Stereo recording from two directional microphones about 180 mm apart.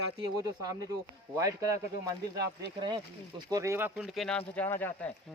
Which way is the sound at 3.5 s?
15° right (ahead or behind).